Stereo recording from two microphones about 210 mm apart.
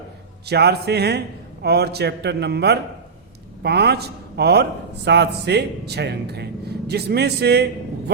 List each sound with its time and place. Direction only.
0.4 s speech: 50° right (ahead or behind)